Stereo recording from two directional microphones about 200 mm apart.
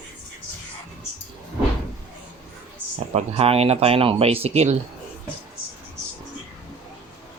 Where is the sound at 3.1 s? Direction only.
30° right (ahead or behind).